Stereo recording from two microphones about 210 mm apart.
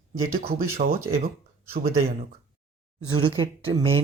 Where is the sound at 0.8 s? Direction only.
40° right (ahead or behind).